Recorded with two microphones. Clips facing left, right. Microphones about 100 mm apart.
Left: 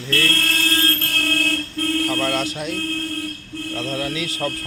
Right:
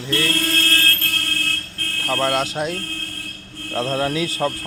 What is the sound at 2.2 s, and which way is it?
Speech, 25° right (ahead or behind).